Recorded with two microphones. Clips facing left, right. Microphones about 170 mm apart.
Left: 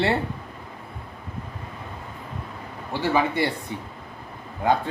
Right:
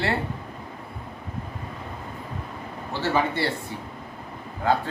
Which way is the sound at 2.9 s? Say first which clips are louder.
Left 2 dB; 15° left (ahead or behind).